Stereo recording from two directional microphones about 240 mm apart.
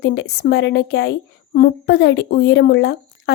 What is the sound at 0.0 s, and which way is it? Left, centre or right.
Speech, left.